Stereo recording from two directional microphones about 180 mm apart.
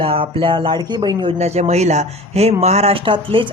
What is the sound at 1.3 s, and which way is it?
Speech, 35° right (ahead or behind).